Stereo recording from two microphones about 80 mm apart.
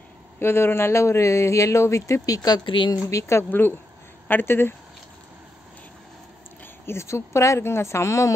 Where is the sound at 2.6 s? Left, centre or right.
Left.